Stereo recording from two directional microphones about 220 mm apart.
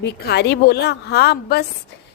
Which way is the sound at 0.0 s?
50° left (ahead or behind).